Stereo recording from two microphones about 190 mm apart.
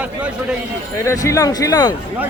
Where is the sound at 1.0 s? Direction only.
15° left (ahead or behind).